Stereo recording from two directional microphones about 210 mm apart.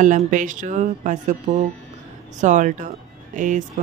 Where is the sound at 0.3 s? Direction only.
35° right (ahead or behind).